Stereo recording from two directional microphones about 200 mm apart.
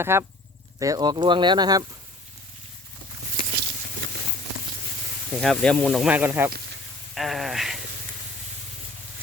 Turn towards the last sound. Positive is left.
turn(degrees=0)  # may be behind; listen again after turning